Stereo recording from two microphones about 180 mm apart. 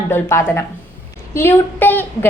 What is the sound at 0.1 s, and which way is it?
A woman's voice, 15° left (ahead or behind).